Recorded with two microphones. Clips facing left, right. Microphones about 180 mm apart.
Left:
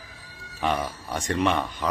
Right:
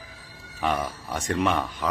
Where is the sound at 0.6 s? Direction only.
Centre (ahead or behind).